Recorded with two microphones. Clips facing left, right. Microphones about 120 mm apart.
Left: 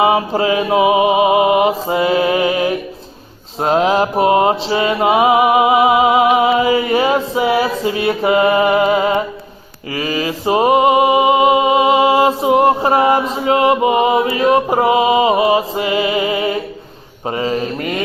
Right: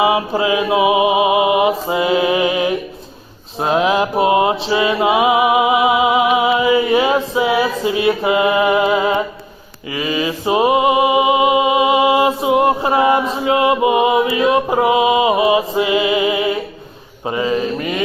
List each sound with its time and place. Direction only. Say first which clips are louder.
0.0 s music: left 1 dB; 40° left (ahead or behind)
9.9 s a sound: even; 35° left (ahead or behind)
13.5 s music: left 1 dB; 35° left (ahead or behind)